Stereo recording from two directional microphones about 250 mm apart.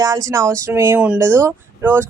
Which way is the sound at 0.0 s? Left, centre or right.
Centre.